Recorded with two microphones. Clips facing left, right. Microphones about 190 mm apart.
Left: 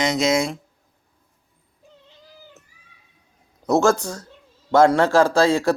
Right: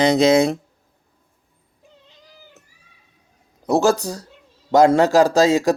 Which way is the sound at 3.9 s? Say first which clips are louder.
Right 2 dB; 35° right (ahead or behind).